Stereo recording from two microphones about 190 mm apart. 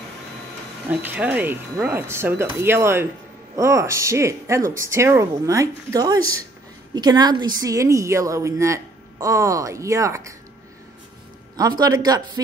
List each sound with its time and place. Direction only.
0.8 s a woman's voice: 10° right (ahead or behind)
11.5 s a man's voice: 20° right (ahead or behind)